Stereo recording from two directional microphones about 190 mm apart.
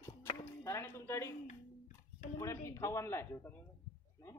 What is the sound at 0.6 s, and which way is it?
Music, 15° left (ahead or behind).